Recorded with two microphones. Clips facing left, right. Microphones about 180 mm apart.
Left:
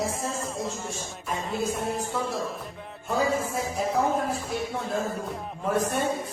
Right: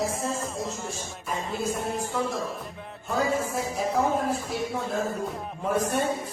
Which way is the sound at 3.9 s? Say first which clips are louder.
Right 1 dB; centre (ahead or behind).